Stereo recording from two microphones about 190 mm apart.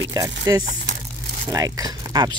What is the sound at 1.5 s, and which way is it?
Speech, 20° right (ahead or behind).